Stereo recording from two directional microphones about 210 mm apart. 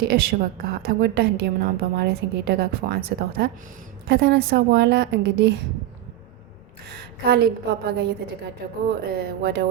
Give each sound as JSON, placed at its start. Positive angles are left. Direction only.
{"t": 0.1, "sound": "a woman's voice", "side_deg": -50}
{"t": 6.8, "sound": "a woman's voice", "side_deg": -50}
{"t": 9.1, "sound": "a woman's voice", "side_deg": -50}